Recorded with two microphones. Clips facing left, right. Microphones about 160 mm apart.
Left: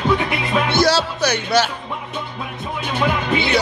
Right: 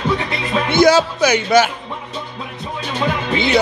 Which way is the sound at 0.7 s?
50° right (ahead or behind).